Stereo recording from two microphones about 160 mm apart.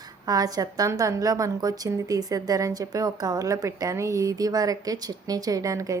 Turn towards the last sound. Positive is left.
turn(degrees=-20)  # may be behind; listen again after turning